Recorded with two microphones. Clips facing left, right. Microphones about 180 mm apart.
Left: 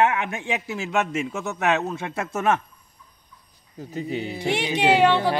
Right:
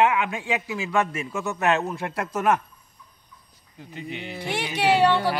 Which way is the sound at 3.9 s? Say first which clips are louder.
Left 6 dB; 40° left (ahead or behind).